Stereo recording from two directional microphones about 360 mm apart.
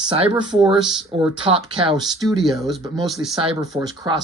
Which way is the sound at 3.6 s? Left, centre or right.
Centre.